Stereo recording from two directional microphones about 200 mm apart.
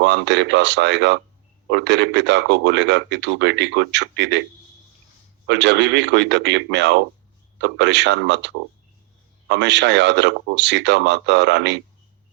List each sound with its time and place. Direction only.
0.0 s speech: 60° right (ahead or behind)
5.5 s speech: 60° right (ahead or behind)